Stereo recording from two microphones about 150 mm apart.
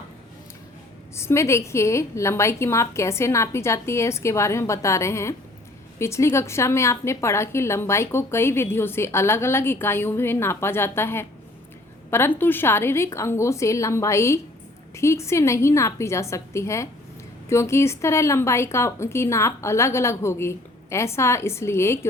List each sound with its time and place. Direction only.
1.1 s a woman's voice: 20° left (ahead or behind)